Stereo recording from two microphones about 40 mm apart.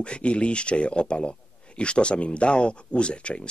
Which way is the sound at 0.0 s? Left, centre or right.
Left.